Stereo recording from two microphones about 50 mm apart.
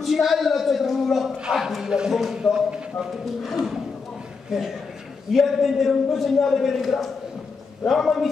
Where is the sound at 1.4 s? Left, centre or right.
Centre.